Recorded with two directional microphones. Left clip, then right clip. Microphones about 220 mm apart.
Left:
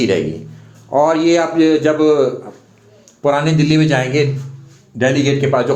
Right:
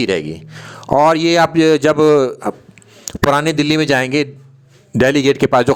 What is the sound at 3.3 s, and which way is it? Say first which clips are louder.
A man's voice: even; 45° right (ahead or behind).